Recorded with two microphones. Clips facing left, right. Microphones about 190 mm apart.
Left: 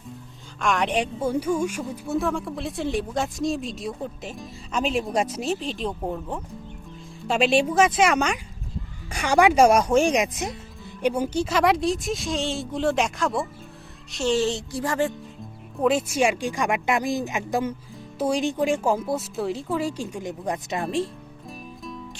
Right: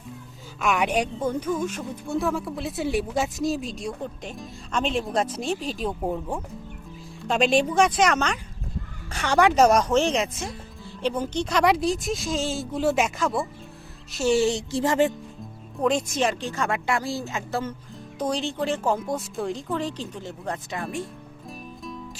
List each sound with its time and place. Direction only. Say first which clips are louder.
0.6 s speech: even; 5° right (ahead or behind)
7.3 s speech: left 1 dB; 5° left (ahead or behind); by 14.6 s 10° right (ahead or behind)
14.7 s music: right 3 dB; 25° right (ahead or behind)
15.8 s speech: left 2 dB; 5° left (ahead or behind); by 21.0 s 25° left (ahead or behind)